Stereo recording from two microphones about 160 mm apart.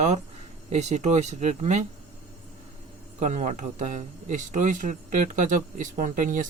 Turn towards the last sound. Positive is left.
turn(degrees=-55)  # may be behind; listen again after turning